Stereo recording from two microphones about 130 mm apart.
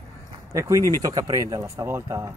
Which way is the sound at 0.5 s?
25° right (ahead or behind).